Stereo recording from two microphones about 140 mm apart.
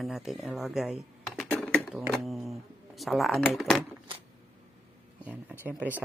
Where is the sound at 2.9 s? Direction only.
Centre (ahead or behind).